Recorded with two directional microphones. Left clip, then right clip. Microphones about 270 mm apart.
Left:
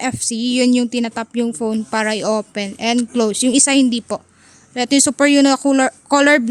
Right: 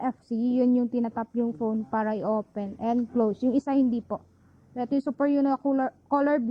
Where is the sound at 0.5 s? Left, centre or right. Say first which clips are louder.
Left 9 dB; left.